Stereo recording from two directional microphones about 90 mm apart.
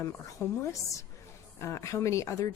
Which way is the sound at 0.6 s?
35° left (ahead or behind).